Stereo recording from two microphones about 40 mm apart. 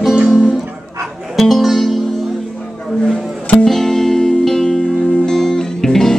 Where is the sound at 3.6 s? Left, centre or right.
Centre.